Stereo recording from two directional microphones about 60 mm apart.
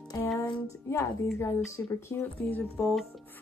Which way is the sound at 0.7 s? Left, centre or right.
Left.